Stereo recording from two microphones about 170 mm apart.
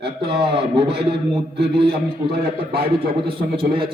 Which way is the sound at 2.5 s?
65° right (ahead or behind).